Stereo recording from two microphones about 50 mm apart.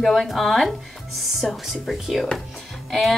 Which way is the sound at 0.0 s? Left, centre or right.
Centre.